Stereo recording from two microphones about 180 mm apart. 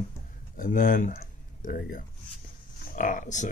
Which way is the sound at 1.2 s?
50° left (ahead or behind).